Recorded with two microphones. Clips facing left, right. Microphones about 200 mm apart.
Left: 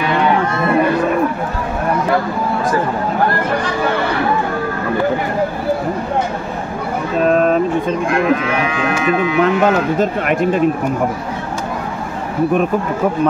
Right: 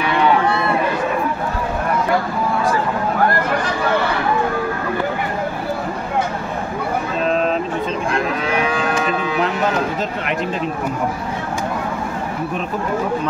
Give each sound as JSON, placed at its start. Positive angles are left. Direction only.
{"t": 7.2, "sound": "vehicle", "side_deg": 50}
{"t": 8.6, "sound": "speech", "side_deg": -35}
{"t": 9.9, "sound": "speech", "side_deg": 50}